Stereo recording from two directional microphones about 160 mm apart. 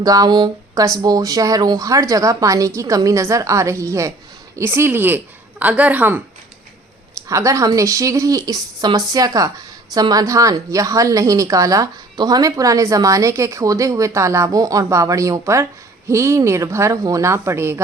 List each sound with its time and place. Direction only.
0.0 s a woman's voice: 25° right (ahead or behind)
7.3 s a woman's voice: 20° right (ahead or behind)